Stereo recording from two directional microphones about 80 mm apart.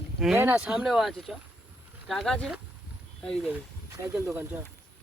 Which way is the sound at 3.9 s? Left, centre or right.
Right.